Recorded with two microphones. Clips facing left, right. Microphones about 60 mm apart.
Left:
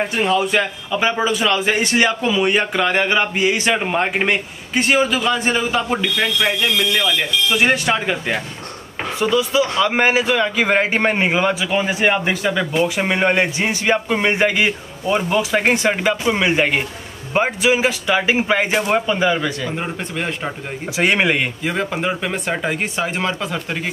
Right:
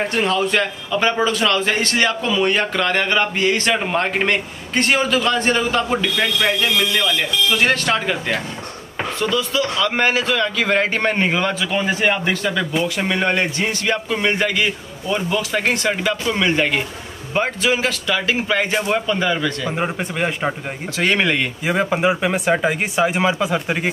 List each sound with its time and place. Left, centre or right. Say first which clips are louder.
0.0 s a man's voice: left 1 dB; centre
19.7 s speech: right 2 dB; centre
21.0 s a man's voice: left 1 dB; centre
21.6 s speech: right 6 dB; centre